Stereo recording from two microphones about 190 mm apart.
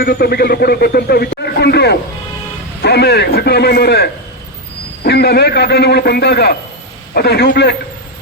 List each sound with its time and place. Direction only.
0.0 s speech: 55° left (ahead or behind)